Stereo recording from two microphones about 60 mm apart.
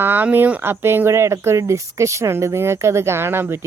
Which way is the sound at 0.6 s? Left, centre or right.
Right.